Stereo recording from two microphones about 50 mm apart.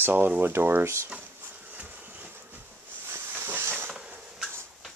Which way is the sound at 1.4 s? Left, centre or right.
Right.